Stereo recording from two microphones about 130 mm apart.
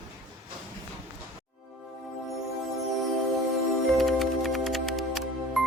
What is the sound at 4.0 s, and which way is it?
Music, centre (ahead or behind).